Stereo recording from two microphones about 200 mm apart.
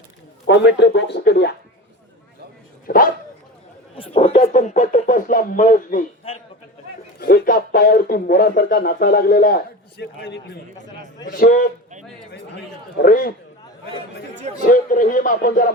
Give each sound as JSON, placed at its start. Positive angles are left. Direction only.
{"t": 0.4, "sound": "speech", "side_deg": 60}
{"t": 2.8, "sound": "speech", "side_deg": 45}
{"t": 3.9, "sound": "speech", "side_deg": 30}
{"t": 7.2, "sound": "speech", "side_deg": 50}
{"t": 11.3, "sound": "speech", "side_deg": 45}
{"t": 12.3, "sound": "speech", "side_deg": 55}
{"t": 14.6, "sound": "speech", "side_deg": 40}